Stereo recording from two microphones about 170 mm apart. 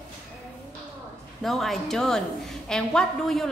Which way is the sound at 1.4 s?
Centre (ahead or behind).